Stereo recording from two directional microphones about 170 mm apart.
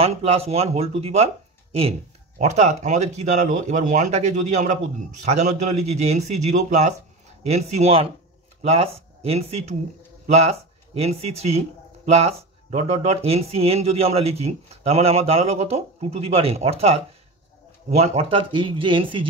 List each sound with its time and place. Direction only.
0.0 s speech: 35° right (ahead or behind)
2.3 s speech: 45° right (ahead or behind)